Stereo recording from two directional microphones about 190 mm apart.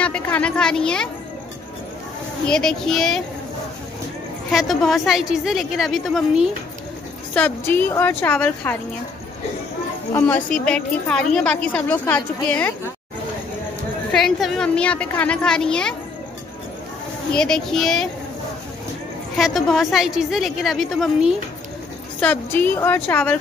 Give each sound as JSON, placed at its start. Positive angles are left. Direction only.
{"t": 0.0, "sound": "speech", "side_deg": 5}
{"t": 2.4, "sound": "a woman's voice", "side_deg": 5}
{"t": 4.5, "sound": "a woman's voice", "side_deg": 0}
{"t": 7.3, "sound": "a woman's voice", "side_deg": 10}
{"t": 10.1, "sound": "a woman's voice", "side_deg": 10}
{"t": 14.1, "sound": "a woman's voice", "side_deg": 0}
{"t": 17.3, "sound": "a woman's voice", "side_deg": 5}
{"t": 19.3, "sound": "a woman's voice", "side_deg": 0}
{"t": 22.2, "sound": "a woman's voice", "side_deg": 10}